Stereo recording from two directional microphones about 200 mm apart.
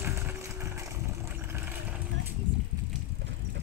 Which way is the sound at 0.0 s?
10° right (ahead or behind).